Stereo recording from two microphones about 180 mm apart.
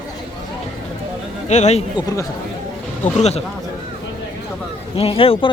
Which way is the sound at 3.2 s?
35° left (ahead or behind).